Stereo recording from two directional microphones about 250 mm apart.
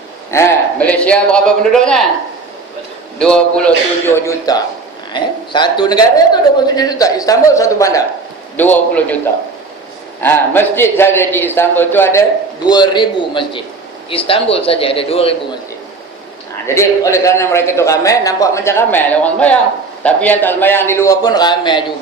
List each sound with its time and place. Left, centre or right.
0.3 s a man's voice: centre
3.2 s a man's voice: centre
10.2 s a man's voice: centre
16.6 s a man's voice: centre